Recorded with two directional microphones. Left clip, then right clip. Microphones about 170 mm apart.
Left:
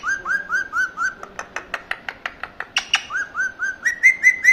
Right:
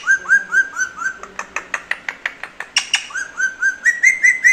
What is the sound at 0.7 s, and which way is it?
Whistling, 35° left (ahead or behind).